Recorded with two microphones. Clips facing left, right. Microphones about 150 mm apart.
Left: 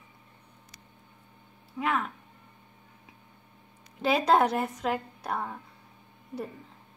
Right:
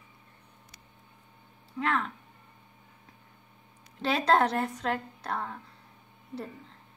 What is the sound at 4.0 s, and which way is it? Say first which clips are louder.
Female singing: left 2 dB; 10° left (ahead or behind).